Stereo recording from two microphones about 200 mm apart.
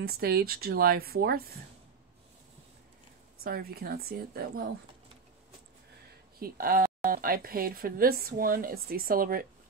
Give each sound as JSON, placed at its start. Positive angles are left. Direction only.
{"t": 0.0, "sound": "speech", "side_deg": -50}
{"t": 3.4, "sound": "speech", "side_deg": -50}
{"t": 6.4, "sound": "speech", "side_deg": -45}